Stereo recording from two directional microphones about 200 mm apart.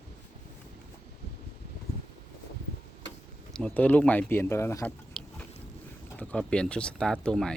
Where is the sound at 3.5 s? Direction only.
5° left (ahead or behind).